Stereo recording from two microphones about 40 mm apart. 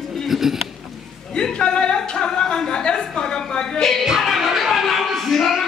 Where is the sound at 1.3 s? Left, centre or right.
Left.